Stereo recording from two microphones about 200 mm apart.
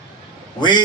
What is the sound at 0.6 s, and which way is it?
Speech, 20° left (ahead or behind).